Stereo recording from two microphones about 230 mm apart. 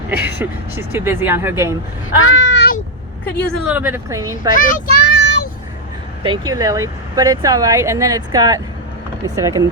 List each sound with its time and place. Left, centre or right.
0.2 s speech: centre
2.0 s a sound: left
3.5 s speech: centre
4.5 s child singing: left
6.2 s speech: centre